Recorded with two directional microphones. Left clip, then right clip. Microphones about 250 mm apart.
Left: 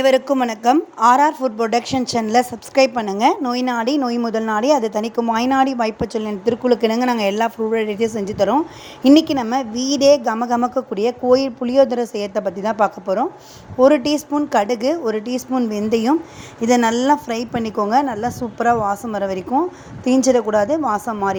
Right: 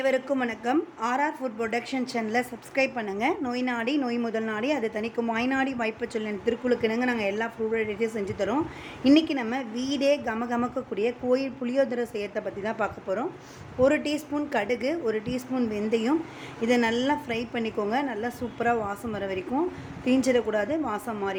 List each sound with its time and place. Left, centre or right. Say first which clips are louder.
0.0 s speech: left 10 dB; left